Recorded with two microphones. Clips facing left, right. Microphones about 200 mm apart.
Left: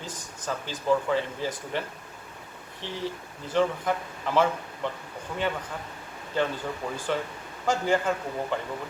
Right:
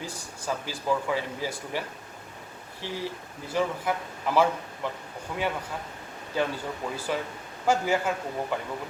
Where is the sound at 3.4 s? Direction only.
10° right (ahead or behind).